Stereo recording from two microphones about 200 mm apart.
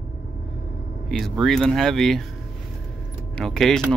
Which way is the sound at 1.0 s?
Centre (ahead or behind).